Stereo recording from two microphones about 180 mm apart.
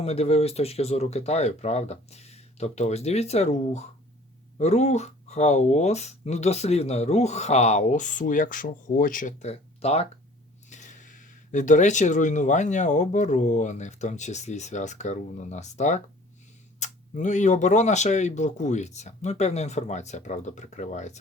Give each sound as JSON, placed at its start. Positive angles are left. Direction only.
{"t": 0.0, "sound": "speech", "side_deg": 35}